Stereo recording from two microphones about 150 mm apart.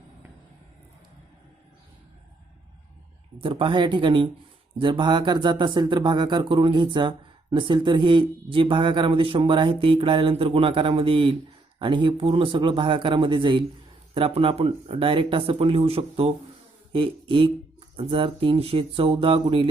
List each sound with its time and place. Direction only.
3.3 s speech: 35° right (ahead or behind)